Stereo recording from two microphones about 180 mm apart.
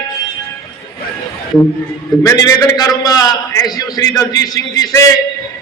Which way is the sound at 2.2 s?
20° left (ahead or behind).